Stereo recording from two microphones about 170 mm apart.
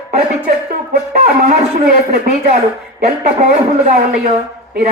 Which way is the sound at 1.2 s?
50° right (ahead or behind).